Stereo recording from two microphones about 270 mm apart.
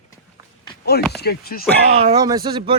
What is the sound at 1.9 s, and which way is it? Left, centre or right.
Speech, centre.